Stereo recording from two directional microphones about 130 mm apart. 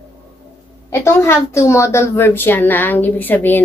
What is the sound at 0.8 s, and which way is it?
A woman's voice, 20° left (ahead or behind).